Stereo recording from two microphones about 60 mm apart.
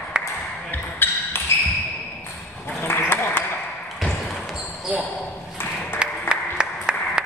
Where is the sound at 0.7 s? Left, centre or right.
Left.